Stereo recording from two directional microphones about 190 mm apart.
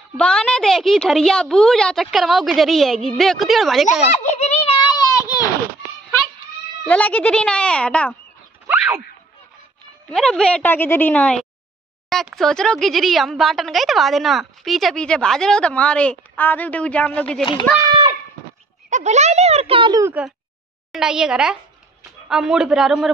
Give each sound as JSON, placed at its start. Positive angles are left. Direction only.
{"t": 0.2, "sound": "speech", "side_deg": 5}
{"t": 4.1, "sound": "children playing", "side_deg": 35}
{"t": 6.9, "sound": "a woman's voice", "side_deg": 5}
{"t": 8.6, "sound": "a sound", "side_deg": -10}
{"t": 10.0, "sound": "a woman's voice", "side_deg": 5}
{"t": 17.7, "sound": "a sound", "side_deg": -25}
{"t": 18.9, "sound": "speech", "side_deg": -40}
{"t": 20.1, "sound": "speech", "side_deg": -5}